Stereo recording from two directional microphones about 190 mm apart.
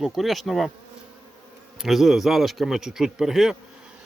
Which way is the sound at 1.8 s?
Centre (ahead or behind).